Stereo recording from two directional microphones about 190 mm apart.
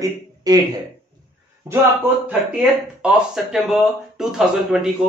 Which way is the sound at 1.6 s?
10° right (ahead or behind).